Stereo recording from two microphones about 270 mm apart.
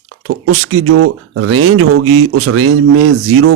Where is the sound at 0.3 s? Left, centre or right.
Right.